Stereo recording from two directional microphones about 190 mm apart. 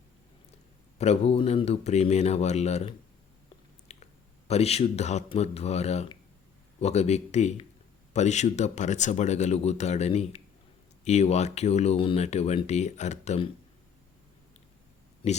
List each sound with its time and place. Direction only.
0.9 s speech: 35° left (ahead or behind)